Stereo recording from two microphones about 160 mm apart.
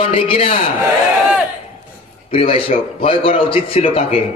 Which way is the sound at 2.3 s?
35° left (ahead or behind).